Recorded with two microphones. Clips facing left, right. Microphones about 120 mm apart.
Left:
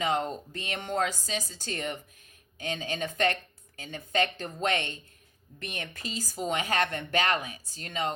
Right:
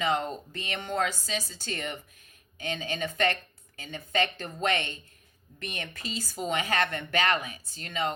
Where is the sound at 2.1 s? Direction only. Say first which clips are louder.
Even; 45° right (ahead or behind).